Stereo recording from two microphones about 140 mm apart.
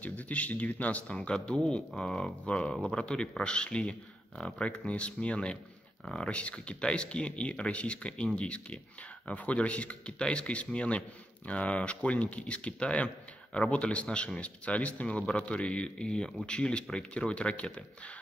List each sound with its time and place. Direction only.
0.0 s speech: 10° left (ahead or behind)